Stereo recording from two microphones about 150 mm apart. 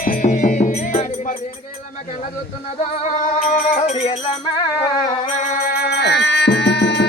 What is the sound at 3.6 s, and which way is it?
Music, 60° left (ahead or behind).